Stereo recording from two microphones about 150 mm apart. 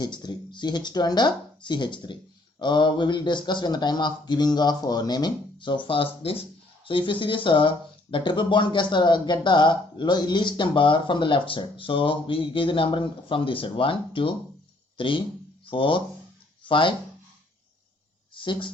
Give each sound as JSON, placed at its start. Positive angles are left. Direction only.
{"t": 0.0, "sound": "speech", "side_deg": 30}
{"t": 18.3, "sound": "speech", "side_deg": 30}